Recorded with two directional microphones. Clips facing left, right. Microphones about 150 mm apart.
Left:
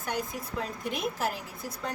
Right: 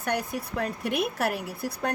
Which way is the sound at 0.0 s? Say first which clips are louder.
Right 4 dB; 70° right (ahead or behind).